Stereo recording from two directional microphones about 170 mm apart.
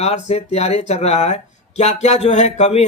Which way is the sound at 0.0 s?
40° left (ahead or behind).